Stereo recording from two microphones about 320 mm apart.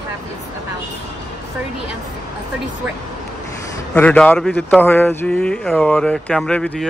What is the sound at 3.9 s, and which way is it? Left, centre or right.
Speech, centre.